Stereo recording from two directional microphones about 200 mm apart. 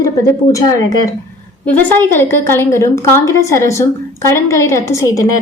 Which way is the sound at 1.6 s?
10° left (ahead or behind).